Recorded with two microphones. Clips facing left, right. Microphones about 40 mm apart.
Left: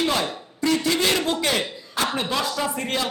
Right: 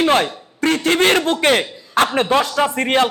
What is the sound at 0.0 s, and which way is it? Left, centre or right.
A man's voice, right.